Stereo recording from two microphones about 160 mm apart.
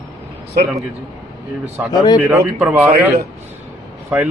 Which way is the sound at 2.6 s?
5° right (ahead or behind).